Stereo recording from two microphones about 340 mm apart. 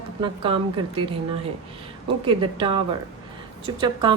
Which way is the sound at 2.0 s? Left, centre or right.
Centre.